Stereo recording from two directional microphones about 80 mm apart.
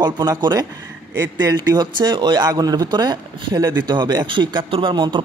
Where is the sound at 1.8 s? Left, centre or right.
Right.